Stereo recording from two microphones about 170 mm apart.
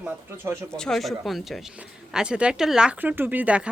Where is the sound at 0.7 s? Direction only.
5° left (ahead or behind).